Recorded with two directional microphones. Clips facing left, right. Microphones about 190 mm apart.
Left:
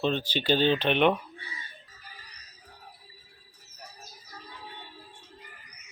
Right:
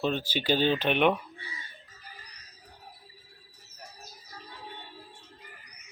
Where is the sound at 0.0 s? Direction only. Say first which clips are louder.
Left 1 dB; 10° right (ahead or behind).